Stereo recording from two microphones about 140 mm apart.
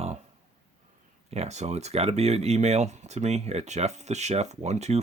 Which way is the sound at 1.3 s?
50° right (ahead or behind).